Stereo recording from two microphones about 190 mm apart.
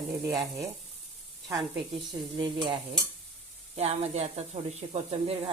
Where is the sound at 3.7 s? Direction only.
35° right (ahead or behind).